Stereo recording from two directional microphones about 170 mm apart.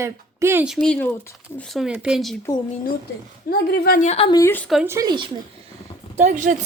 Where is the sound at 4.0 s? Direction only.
40° left (ahead or behind).